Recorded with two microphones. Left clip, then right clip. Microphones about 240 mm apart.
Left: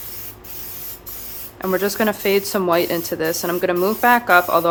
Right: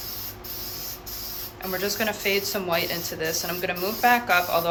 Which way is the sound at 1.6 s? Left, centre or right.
Left.